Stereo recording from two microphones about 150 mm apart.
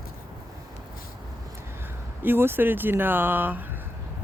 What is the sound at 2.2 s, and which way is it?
Speech, 15° right (ahead or behind).